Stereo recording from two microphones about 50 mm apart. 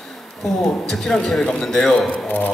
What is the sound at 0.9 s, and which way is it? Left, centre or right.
Speech, centre.